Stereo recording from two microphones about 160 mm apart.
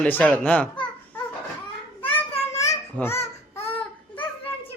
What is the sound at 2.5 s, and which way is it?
Babbling, 15° left (ahead or behind).